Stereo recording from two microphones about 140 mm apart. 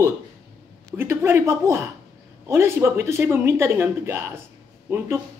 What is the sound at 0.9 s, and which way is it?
A man's voice, 20° right (ahead or behind).